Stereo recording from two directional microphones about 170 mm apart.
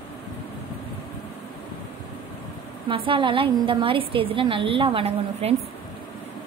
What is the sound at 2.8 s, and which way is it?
A woman's voice, 30° right (ahead or behind).